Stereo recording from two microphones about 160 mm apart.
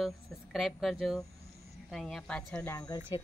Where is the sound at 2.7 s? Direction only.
25° left (ahead or behind).